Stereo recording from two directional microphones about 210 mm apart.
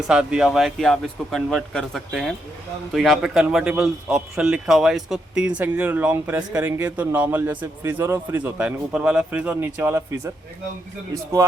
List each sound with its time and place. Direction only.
0.1 s a man's voice: 5° right (ahead or behind)